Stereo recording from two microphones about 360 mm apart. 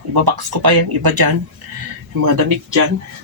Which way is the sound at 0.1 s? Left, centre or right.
Right.